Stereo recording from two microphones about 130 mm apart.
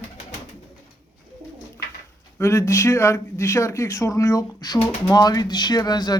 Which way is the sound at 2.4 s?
20° left (ahead or behind).